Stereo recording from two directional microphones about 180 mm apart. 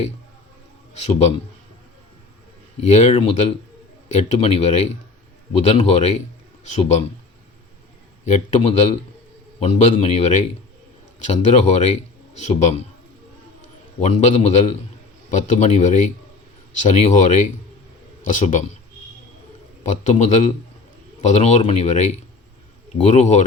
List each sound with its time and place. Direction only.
0.9 s speech: 35° left (ahead or behind)
2.8 s speech: 40° left (ahead or behind)
8.2 s speech: 35° left (ahead or behind)
14.0 s speech: 40° left (ahead or behind)
20.1 s speech: 40° left (ahead or behind)